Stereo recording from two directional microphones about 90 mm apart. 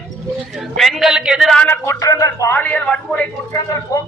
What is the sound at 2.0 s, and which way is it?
Speech, 40° left (ahead or behind).